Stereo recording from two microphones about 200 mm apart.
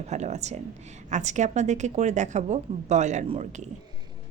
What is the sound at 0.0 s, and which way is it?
A woman's voice, 35° right (ahead or behind).